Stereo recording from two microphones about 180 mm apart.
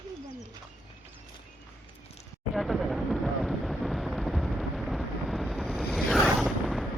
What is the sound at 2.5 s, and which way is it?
Vehicle, centre (ahead or behind).